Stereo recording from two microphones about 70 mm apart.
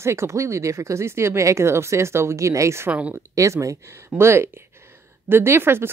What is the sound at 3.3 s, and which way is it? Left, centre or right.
Speech, right.